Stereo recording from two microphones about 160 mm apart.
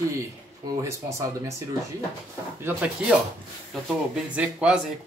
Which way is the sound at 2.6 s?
5° right (ahead or behind).